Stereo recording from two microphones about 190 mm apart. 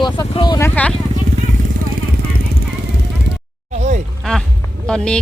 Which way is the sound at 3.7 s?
35° right (ahead or behind).